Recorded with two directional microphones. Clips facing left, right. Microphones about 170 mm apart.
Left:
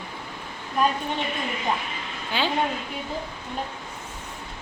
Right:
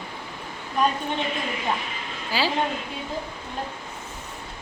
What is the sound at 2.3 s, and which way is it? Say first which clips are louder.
Speech: right 1 dB; 5° right (ahead or behind).